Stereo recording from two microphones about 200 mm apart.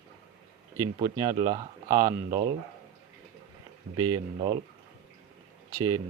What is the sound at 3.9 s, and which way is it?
Speech, 20° right (ahead or behind).